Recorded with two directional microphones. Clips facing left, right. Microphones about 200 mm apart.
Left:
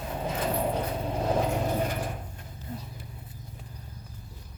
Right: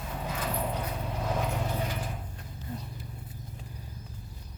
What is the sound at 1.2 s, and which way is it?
Vehicle, 35° left (ahead or behind).